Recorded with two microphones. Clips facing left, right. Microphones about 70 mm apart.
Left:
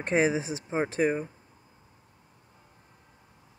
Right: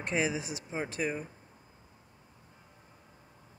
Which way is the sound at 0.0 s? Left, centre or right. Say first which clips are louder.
Left 6 dB; left.